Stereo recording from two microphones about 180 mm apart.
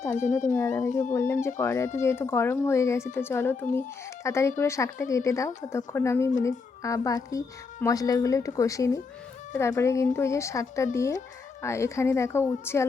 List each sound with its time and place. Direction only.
0.1 s speech: 45° left (ahead or behind)
0.5 s speech: 15° left (ahead or behind)